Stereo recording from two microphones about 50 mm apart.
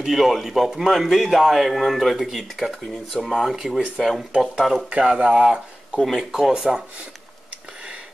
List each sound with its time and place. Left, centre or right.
0.0 s speech: centre
4.8 s speech: right
6.0 s speech: centre
6.5 s speech: centre